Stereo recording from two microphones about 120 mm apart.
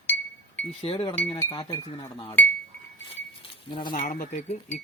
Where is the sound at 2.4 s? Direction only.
15° left (ahead or behind).